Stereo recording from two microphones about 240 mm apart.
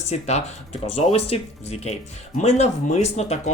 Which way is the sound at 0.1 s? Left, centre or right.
Left.